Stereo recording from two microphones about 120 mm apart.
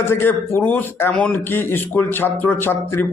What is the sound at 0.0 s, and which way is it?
A man's voice, 20° left (ahead or behind).